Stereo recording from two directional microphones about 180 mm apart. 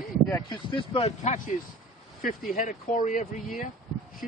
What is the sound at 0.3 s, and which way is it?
Speech, 25° left (ahead or behind).